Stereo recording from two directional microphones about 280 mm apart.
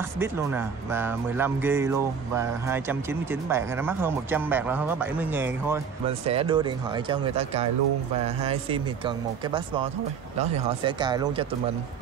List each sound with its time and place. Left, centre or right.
0.2 s speech: centre
6.0 s speech: right